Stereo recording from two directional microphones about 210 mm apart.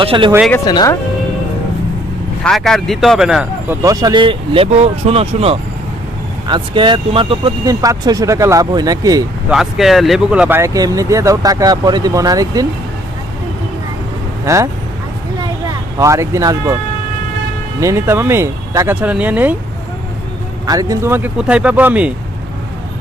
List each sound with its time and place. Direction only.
0.0 s speech: 25° right (ahead or behind)
0.7 s speech: 20° left (ahead or behind)
2.4 s speech: centre (ahead or behind)
3.8 s speech: 20° right (ahead or behind)
9.5 s speech: centre (ahead or behind)
14.4 s speech: 15° right (ahead or behind)
16.0 s speech: 15° right (ahead or behind)
17.7 s speech: 10° right (ahead or behind)
20.7 s speech: 15° right (ahead or behind)